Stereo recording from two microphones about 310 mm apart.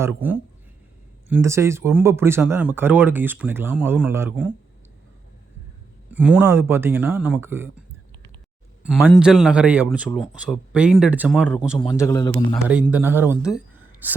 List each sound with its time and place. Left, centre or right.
0.0 s speech: centre
6.1 s speech: centre
8.8 s a man's voice: centre
11.8 s a man's voice: centre
12.6 s speech: centre
13.5 s a sound: centre